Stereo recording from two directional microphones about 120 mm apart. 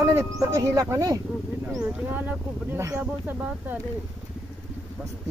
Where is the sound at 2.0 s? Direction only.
15° right (ahead or behind).